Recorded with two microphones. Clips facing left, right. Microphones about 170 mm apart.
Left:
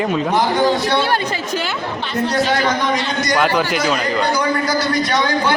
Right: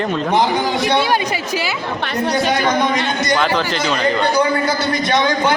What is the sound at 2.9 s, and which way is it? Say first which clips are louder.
Speech: right 1 dB; 25° right (ahead or behind).